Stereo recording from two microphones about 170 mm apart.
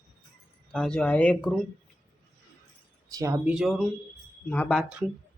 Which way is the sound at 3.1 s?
20° right (ahead or behind).